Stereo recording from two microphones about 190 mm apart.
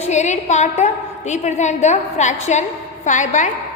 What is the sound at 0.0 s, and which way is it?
A woman's voice, 35° left (ahead or behind).